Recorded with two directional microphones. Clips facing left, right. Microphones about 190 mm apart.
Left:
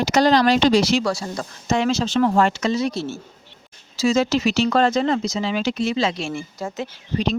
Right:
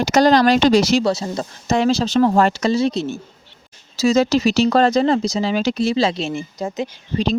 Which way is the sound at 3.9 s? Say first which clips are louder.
Right 3 dB; 40° right (ahead or behind).